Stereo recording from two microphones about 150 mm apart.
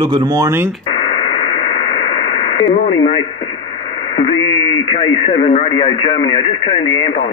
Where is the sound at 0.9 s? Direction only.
40° left (ahead or behind).